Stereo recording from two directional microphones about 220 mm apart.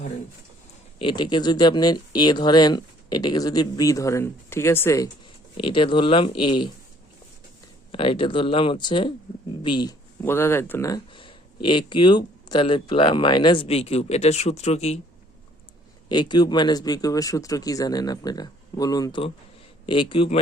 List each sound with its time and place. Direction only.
0.9 s speech: 20° left (ahead or behind)
5.5 s speech: 25° left (ahead or behind)
7.9 s speech: 25° left (ahead or behind)
16.0 s speech: 20° left (ahead or behind)